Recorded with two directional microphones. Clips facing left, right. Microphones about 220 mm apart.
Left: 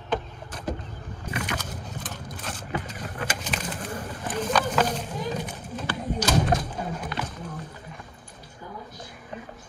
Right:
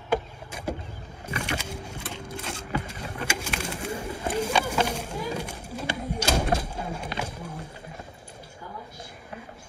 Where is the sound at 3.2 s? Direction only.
10° right (ahead or behind).